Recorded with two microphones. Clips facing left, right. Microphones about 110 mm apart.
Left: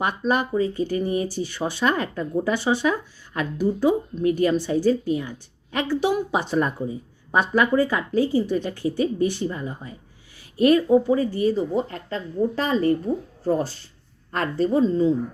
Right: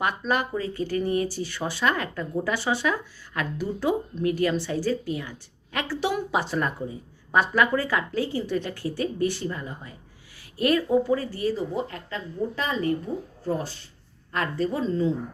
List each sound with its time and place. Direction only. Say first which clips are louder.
0.0 s speech: left 3 dB; 20° left (ahead or behind)
4.2 s a woman's voice: left 4 dB; 25° left (ahead or behind)